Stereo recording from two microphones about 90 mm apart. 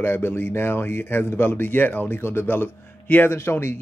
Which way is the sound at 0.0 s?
25° left (ahead or behind).